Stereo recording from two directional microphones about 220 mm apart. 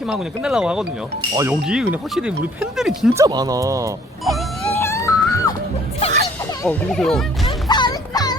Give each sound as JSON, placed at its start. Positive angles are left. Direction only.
{"t": 0.0, "sound": "speech", "side_deg": 0}
{"t": 3.2, "sound": "speech", "side_deg": -15}
{"t": 4.3, "sound": "music", "side_deg": 0}
{"t": 4.8, "sound": "music", "side_deg": 10}
{"t": 6.6, "sound": "speech", "side_deg": 5}
{"t": 7.4, "sound": "music", "side_deg": 20}